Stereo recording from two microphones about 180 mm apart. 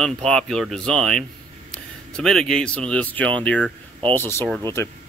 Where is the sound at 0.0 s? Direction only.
5° left (ahead or behind).